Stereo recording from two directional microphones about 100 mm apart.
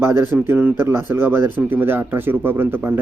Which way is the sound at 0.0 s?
25° right (ahead or behind).